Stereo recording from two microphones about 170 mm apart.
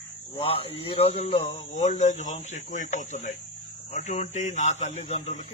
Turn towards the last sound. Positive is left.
turn(degrees=40)  # may be behind; listen again after turning